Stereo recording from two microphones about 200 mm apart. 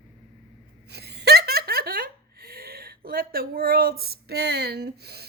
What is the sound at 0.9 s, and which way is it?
Speech, 55° right (ahead or behind).